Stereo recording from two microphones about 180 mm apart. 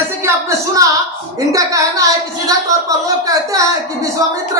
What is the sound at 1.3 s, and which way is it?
Speech, 20° right (ahead or behind).